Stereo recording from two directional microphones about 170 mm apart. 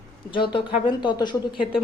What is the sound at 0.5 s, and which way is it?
A woman's voice, 25° left (ahead or behind).